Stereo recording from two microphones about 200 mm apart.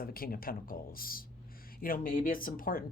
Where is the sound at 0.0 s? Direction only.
45° left (ahead or behind).